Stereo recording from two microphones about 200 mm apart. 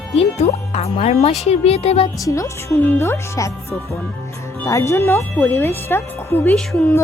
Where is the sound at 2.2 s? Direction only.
15° left (ahead or behind).